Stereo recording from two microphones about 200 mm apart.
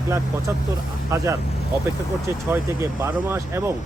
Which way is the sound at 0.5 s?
10° right (ahead or behind).